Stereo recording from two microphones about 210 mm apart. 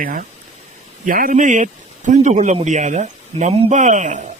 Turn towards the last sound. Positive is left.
turn(degrees=-35)  # may be behind; listen again after turning